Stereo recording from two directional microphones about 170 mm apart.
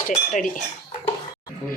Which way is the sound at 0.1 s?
50° left (ahead or behind).